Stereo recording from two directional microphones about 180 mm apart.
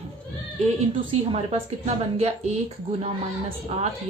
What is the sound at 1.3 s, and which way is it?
A woman's voice, 35° right (ahead or behind).